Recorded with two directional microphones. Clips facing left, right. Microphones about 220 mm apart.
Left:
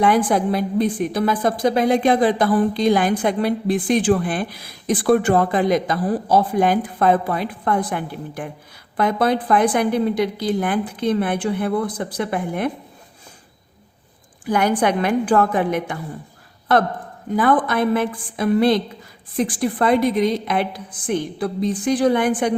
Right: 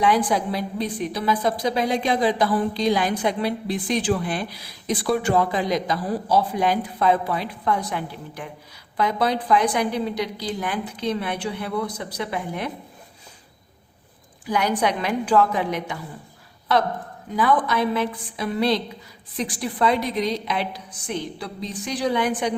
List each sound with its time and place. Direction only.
0.0 s a woman's voice: 50° left (ahead or behind)
14.4 s a woman's voice: 50° left (ahead or behind)